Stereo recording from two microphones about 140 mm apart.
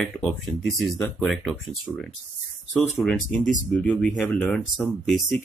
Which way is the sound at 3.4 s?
65° left (ahead or behind).